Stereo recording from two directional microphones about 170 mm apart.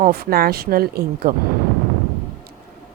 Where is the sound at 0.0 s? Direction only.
65° right (ahead or behind).